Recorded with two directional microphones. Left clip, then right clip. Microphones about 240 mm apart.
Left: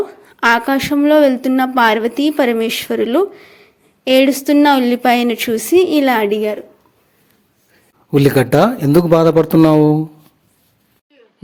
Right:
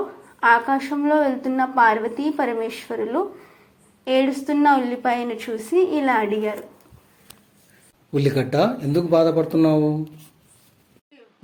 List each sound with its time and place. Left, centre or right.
0.3 s a woman's voice: left
8.1 s a woman's voice: left